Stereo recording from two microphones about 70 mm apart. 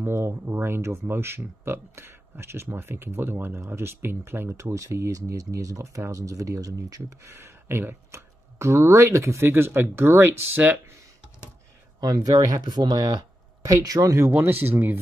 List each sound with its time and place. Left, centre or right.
0.0 s speech: right
4.7 s speech: right
7.2 s speech: right
12.0 s speech: right
13.7 s speech: right
14.2 s speech: right